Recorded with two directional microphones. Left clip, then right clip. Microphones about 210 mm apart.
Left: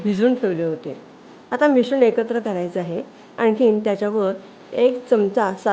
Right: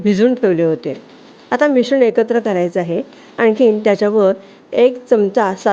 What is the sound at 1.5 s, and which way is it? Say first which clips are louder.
Speech: right 4 dB; 20° right (ahead or behind).